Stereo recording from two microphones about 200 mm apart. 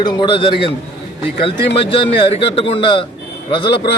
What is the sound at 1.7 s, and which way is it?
A man's voice, 25° left (ahead or behind).